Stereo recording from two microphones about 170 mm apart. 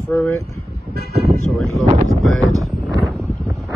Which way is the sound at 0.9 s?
70° right (ahead or behind).